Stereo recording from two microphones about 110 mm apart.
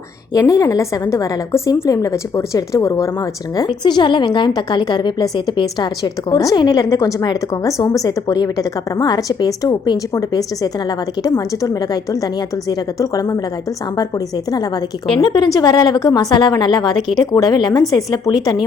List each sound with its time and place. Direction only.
0.3 s a woman's voice: 30° left (ahead or behind)
3.8 s a woman's voice: 45° left (ahead or behind)
15.2 s a woman's voice: 45° left (ahead or behind)